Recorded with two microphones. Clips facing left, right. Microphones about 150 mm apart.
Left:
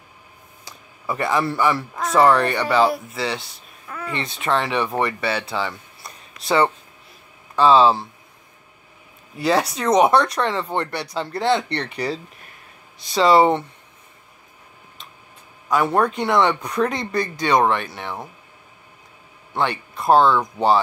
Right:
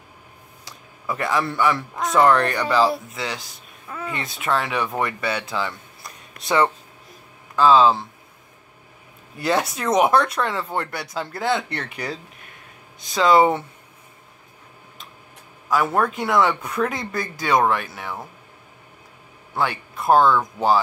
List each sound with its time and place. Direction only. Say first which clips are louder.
0.7 s speech: left 1 dB; centre (ahead or behind)
5.5 s a sound: left 1 dB; centre (ahead or behind)
6.4 s speech: right 1 dB; 55° right (ahead or behind)
7.5 s speech: left 1 dB; centre (ahead or behind)
9.4 s speech: left 2 dB; centre (ahead or behind)
15.7 s speech: left 2 dB; centre (ahead or behind)
19.5 s speech: left 1 dB; 5° right (ahead or behind)
20.2 s speech: even; 15° left (ahead or behind)